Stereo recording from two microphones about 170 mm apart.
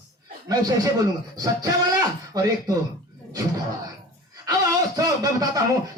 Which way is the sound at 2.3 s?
20° right (ahead or behind).